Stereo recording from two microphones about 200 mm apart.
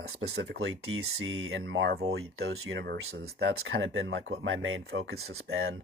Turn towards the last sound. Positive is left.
turn(degrees=-90)